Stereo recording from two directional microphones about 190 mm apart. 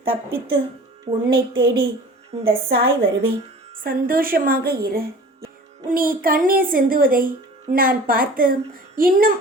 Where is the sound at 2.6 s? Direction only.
55° right (ahead or behind).